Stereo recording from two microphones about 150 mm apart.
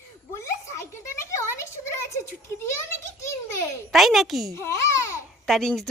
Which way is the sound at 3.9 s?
Centre (ahead or behind).